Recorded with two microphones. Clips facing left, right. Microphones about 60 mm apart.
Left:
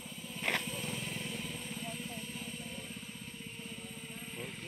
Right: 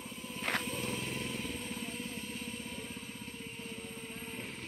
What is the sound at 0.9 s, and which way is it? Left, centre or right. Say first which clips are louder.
Vehicle: right 2 dB; right.